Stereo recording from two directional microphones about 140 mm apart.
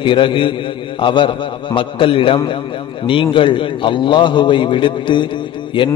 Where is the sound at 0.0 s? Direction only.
35° left (ahead or behind).